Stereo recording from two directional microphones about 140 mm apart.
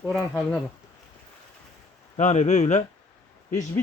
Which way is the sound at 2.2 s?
55° left (ahead or behind).